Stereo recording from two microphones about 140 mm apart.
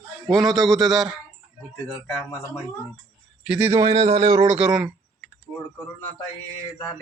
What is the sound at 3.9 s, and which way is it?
Speech, 50° right (ahead or behind).